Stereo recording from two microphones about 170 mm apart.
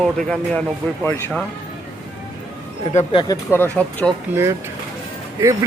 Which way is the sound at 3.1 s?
20° left (ahead or behind).